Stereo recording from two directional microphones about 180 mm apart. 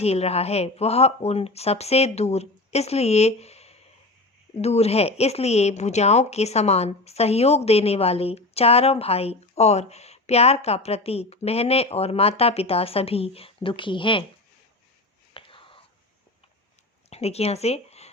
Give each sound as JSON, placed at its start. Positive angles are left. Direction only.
{"t": 0.0, "sound": "a woman's voice", "side_deg": 35}
{"t": 15.3, "sound": "whispering", "side_deg": 30}
{"t": 17.1, "sound": "speech", "side_deg": 35}